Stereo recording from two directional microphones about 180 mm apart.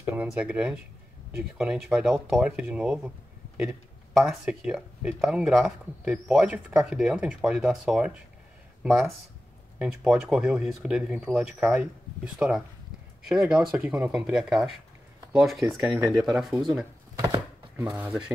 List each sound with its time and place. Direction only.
0.0 s speech: 10° right (ahead or behind)
4.2 s speech: 5° right (ahead or behind)
9.8 s speech: 5° right (ahead or behind)
17.1 s chopping: 15° right (ahead or behind)
17.9 s speech: 10° right (ahead or behind)